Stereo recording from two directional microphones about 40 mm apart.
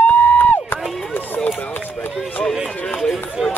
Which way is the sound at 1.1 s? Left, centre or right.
Left.